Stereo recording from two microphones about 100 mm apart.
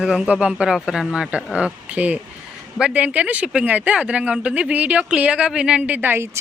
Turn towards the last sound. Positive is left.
turn(degrees=-25)  # may be behind; listen again after turning